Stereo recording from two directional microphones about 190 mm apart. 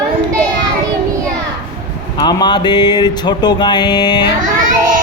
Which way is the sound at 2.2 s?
25° left (ahead or behind).